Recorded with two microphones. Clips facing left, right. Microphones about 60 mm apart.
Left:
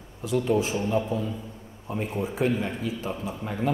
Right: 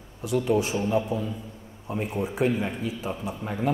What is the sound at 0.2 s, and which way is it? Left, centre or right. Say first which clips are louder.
A man's voice: even; centre.